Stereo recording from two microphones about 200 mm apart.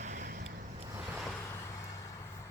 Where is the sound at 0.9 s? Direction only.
10° right (ahead or behind).